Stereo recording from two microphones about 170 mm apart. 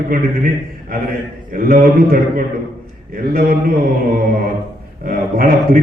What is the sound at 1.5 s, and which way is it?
A man's voice, 60° right (ahead or behind).